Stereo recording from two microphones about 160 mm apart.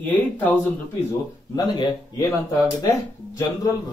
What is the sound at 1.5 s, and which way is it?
Speech, 25° left (ahead or behind).